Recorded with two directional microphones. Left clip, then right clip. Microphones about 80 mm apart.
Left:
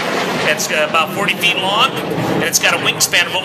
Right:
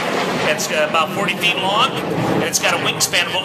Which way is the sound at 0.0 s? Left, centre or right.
Centre.